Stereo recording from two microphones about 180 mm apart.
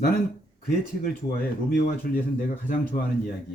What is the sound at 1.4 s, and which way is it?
Speech, 55° left (ahead or behind).